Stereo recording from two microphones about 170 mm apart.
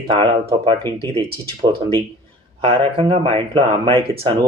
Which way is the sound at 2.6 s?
35° right (ahead or behind).